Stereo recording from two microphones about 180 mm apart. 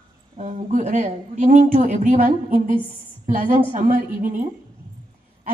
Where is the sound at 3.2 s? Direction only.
45° right (ahead or behind).